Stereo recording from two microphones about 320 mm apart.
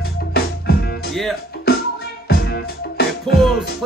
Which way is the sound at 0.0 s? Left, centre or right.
Left.